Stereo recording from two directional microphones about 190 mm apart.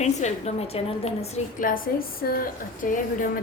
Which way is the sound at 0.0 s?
35° left (ahead or behind).